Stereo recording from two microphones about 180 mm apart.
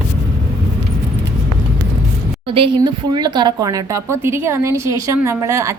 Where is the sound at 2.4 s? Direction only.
30° right (ahead or behind).